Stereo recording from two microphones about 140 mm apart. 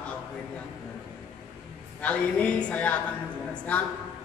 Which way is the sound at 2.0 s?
10° left (ahead or behind).